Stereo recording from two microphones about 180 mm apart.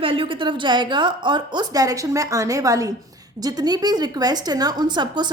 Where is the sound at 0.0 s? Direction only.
30° right (ahead or behind).